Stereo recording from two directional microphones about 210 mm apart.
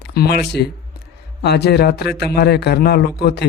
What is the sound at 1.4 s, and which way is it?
A man's voice, 50° left (ahead or behind).